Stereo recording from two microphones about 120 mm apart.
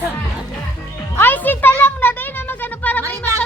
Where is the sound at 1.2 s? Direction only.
15° left (ahead or behind).